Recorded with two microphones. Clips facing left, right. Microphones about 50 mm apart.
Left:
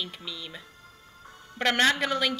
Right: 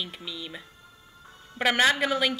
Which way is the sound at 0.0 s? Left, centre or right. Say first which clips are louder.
Right 1 dB; centre.